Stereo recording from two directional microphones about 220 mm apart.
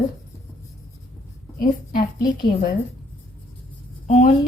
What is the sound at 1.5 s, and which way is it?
Speech, 40° left (ahead or behind).